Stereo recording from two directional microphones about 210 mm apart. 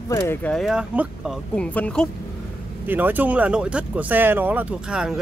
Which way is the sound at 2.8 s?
10° right (ahead or behind).